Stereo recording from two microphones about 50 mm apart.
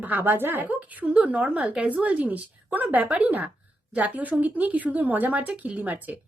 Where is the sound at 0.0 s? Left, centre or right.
Right.